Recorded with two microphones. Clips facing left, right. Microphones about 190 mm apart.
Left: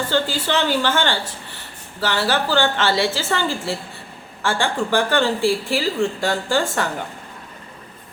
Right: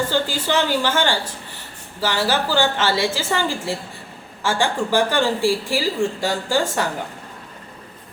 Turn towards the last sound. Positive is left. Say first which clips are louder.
# even
turn(degrees=-10)  # may be behind; listen again after turning